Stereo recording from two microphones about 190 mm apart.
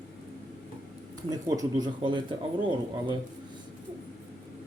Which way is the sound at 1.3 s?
20° right (ahead or behind).